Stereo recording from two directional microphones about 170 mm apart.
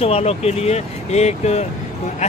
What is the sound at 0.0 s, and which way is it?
Speech, 35° left (ahead or behind).